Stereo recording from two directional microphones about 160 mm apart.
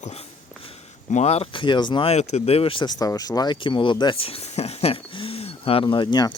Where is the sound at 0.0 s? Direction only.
40° left (ahead or behind).